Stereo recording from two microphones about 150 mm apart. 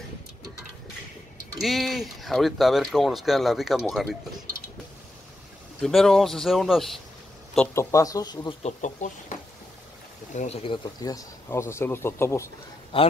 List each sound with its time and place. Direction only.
1.6 s speech: centre (ahead or behind)
5.8 s speech: 5° left (ahead or behind)
7.5 s speech: 15° left (ahead or behind)
8.6 s speech: 55° left (ahead or behind)
10.3 s speech: 45° left (ahead or behind)
11.0 s speech: 25° left (ahead or behind)
12.9 s speech: 35° left (ahead or behind)